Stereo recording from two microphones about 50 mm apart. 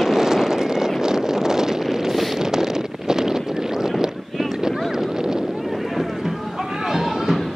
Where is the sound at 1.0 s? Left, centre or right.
Centre.